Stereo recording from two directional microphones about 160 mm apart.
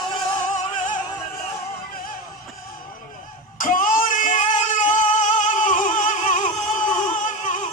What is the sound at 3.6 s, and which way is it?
Music, 55° left (ahead or behind).